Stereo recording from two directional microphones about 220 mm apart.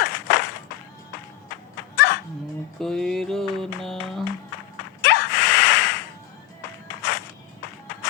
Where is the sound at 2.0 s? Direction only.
50° left (ahead or behind).